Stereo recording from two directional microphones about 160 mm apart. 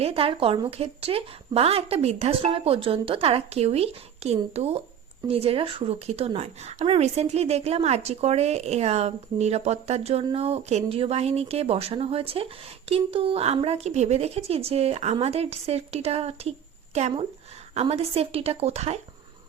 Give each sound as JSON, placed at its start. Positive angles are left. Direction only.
{"t": 0.0, "sound": "speech", "side_deg": -35}